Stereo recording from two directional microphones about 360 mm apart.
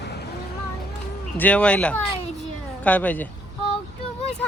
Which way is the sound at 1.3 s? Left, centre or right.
Centre.